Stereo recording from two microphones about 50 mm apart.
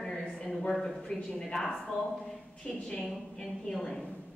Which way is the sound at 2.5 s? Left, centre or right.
Left.